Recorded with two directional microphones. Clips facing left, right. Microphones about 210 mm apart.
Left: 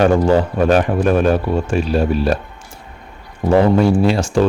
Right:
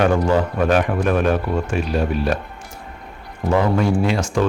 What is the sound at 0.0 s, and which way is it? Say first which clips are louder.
Speech: left 4 dB; 30° left (ahead or behind).